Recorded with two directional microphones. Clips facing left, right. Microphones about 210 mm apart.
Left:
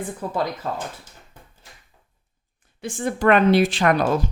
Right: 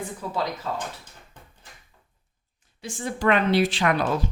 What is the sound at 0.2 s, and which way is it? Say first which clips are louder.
Speech: left 3 dB; 50° left (ahead or behind).